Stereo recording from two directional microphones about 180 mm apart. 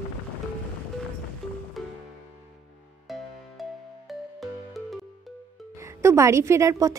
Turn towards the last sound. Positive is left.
turn(degrees=-20)  # may be behind; listen again after turning